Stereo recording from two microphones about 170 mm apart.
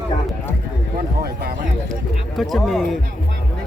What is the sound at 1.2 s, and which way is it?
Speech, 65° right (ahead or behind).